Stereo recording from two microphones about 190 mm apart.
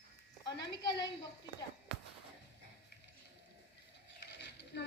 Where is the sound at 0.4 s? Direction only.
65° left (ahead or behind).